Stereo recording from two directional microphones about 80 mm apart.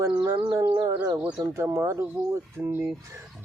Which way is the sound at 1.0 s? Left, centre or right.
Right.